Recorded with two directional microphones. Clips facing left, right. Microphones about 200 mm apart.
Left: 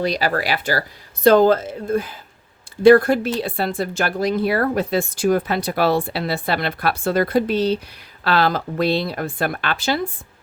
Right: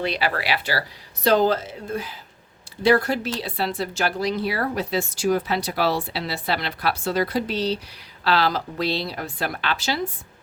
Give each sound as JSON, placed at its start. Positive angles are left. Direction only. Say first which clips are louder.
{"t": 0.0, "sound": "speech", "louder": "left 4 dB", "side_deg": 40}